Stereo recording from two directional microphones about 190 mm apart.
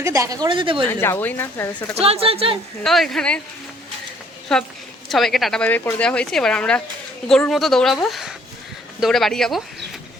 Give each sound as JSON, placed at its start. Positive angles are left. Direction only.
{"t": 0.0, "sound": "speech", "side_deg": -15}
{"t": 0.9, "sound": "speech", "side_deg": 10}
{"t": 2.0, "sound": "speech", "side_deg": -30}
{"t": 2.8, "sound": "speech", "side_deg": 0}
{"t": 4.5, "sound": "speech", "side_deg": 0}